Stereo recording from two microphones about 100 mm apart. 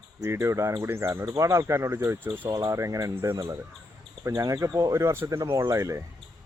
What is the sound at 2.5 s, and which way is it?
Speech, 30° right (ahead or behind).